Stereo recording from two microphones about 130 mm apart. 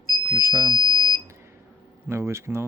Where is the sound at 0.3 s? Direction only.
20° right (ahead or behind).